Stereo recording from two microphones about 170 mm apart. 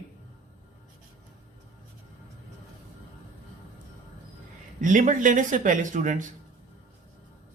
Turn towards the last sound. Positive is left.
turn(degrees=-50)  # may be behind; listen again after turning